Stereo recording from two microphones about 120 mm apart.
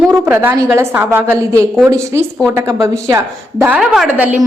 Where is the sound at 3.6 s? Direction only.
10° right (ahead or behind).